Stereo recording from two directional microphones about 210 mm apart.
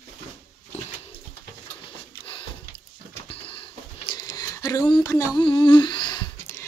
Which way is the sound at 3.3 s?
25° left (ahead or behind).